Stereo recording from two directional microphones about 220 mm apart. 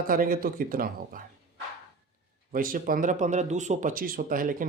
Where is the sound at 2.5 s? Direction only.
40° right (ahead or behind).